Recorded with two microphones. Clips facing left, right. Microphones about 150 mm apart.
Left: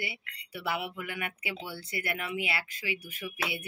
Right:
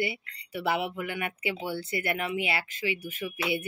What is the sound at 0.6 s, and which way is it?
Speech, 25° right (ahead or behind).